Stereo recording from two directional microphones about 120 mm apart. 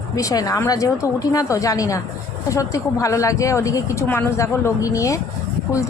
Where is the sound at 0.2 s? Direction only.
30° left (ahead or behind).